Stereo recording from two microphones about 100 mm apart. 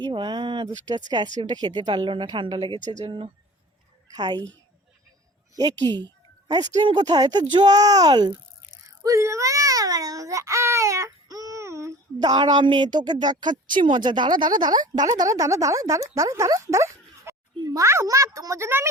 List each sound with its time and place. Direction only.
0.0 s a woman's voice: 50° right (ahead or behind)
0.7 s a woman's voice: 40° right (ahead or behind)
5.5 s a woman's voice: 40° right (ahead or behind)
9.0 s a child's voice: 30° right (ahead or behind)